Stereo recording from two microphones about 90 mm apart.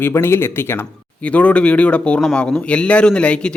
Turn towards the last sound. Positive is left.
turn(degrees=10)  # may be behind; listen again after turning